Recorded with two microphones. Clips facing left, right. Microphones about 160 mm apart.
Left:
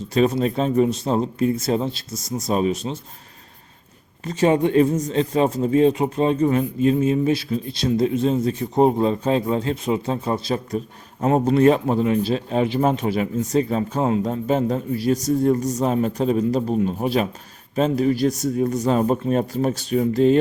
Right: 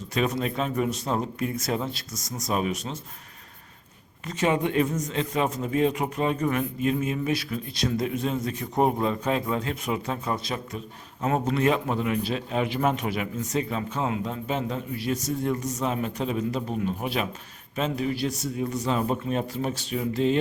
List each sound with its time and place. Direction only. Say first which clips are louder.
0.1 s speech: left 7 dB; 30° left (ahead or behind)
4.3 s a man's voice: left 7 dB; 35° left (ahead or behind)